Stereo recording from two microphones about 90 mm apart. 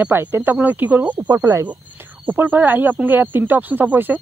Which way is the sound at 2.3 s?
20° right (ahead or behind).